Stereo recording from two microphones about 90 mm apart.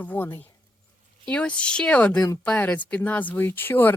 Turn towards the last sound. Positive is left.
turn(degrees=25)  # may be behind; listen again after turning